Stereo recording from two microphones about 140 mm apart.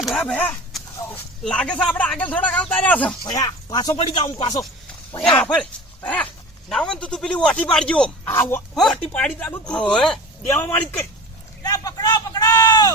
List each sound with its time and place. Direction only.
0.0 s speech: centre (ahead or behind)
3.2 s speech: 25° left (ahead or behind)
5.5 s speech: 10° left (ahead or behind)
8.3 s speech: 15° left (ahead or behind)
8.7 s speech: 5° left (ahead or behind)
10.4 s speech: 15° left (ahead or behind)
11.6 s a sound: 25° left (ahead or behind)